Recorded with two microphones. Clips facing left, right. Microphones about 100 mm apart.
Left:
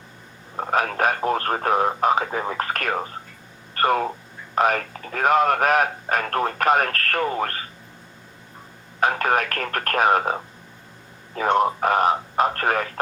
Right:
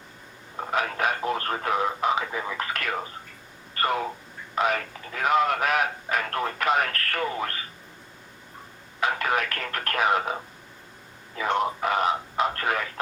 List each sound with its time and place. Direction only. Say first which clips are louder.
0.5 s speech: left 5 dB; 45° left (ahead or behind)
9.0 s speech: left 5 dB; 45° left (ahead or behind)